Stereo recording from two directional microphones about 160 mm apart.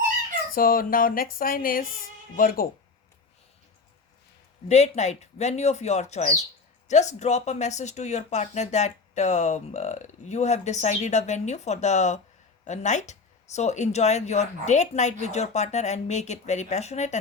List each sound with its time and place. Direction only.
0.5 s speech: 65° left (ahead or behind)
4.7 s speech: 45° left (ahead or behind)